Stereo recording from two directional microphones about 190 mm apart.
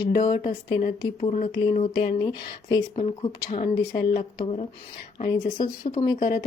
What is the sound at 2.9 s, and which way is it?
Speech, 30° left (ahead or behind).